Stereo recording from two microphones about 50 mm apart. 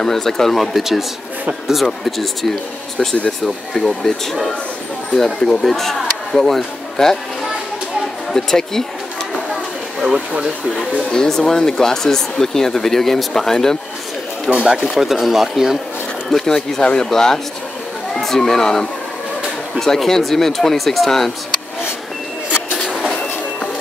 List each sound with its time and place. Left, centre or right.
0.0 s speech: centre
8.3 s speech: centre
10.0 s speech: centre
10.8 s speech: centre
14.8 s speech: centre
16.3 s speech: centre